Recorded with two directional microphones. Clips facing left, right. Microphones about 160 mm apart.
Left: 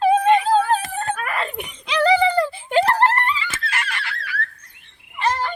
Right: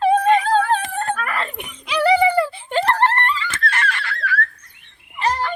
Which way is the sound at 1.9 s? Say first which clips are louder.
Right 1 dB; 10° right (ahead or behind).